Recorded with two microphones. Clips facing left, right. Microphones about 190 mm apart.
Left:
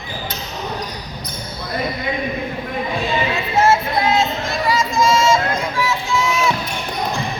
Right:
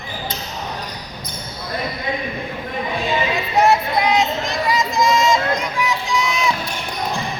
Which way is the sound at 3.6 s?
15° right (ahead or behind).